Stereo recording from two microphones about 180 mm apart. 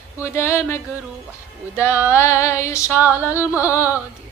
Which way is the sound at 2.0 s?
15° left (ahead or behind).